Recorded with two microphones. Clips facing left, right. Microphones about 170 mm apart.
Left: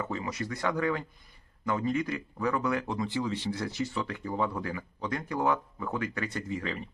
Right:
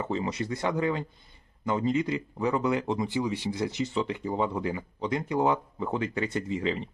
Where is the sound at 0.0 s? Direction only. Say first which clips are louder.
Right 4 dB; 25° right (ahead or behind).